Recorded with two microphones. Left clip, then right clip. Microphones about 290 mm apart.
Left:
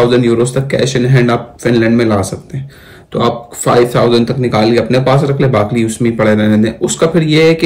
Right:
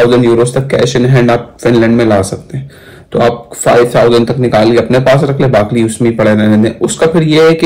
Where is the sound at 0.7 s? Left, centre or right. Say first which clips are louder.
Right 4 dB; right.